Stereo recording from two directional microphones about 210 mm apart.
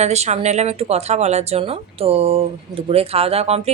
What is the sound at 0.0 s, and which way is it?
A woman's voice, 30° right (ahead or behind).